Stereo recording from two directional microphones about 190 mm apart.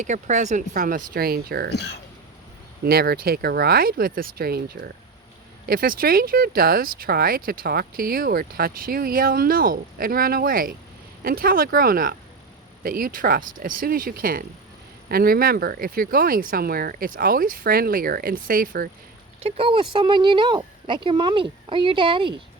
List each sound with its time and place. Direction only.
0.0 s speech: 40° right (ahead or behind); by 1.7 s 55° right (ahead or behind)
2.8 s speech: 55° right (ahead or behind)
19.4 s speech: 30° right (ahead or behind)